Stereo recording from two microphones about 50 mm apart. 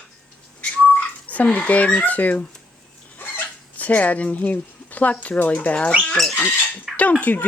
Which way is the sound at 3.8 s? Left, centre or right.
Left.